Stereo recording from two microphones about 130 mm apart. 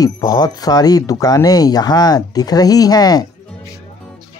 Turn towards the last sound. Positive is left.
turn(degrees=30)  # may be behind; listen again after turning